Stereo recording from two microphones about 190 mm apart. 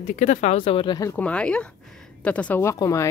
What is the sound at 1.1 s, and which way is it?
Speech, 5° left (ahead or behind).